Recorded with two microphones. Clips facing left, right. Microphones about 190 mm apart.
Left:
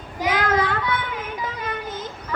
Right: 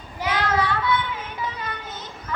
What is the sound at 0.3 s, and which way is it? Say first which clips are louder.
Child singing: left 1 dB; 50° left (ahead or behind).